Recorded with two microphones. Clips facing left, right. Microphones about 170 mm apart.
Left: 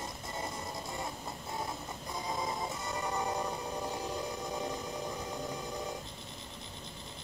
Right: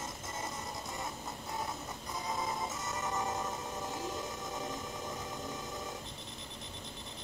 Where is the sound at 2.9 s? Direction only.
15° left (ahead or behind).